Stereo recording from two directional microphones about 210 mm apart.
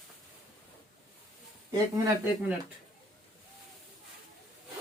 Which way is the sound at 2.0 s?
10° right (ahead or behind).